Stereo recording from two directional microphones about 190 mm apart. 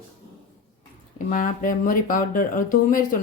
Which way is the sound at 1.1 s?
45° left (ahead or behind).